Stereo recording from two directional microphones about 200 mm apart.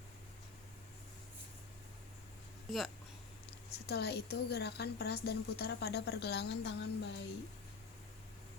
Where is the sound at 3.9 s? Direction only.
55° left (ahead or behind).